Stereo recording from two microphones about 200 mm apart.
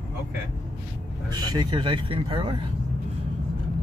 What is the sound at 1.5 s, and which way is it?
Speech, 20° right (ahead or behind).